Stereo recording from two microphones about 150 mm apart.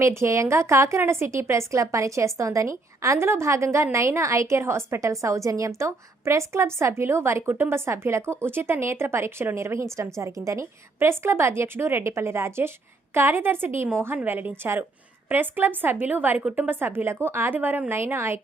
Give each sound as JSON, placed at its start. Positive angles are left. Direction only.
{"t": 0.0, "sound": "a woman's voice", "side_deg": -20}